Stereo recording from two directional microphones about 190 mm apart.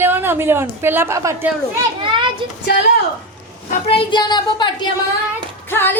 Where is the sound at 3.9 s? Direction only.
25° left (ahead or behind).